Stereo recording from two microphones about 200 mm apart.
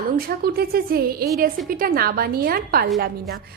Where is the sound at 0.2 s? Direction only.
50° right (ahead or behind).